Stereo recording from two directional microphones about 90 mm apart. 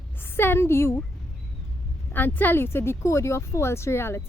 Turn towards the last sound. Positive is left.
turn(degrees=30)  # may be behind; listen again after turning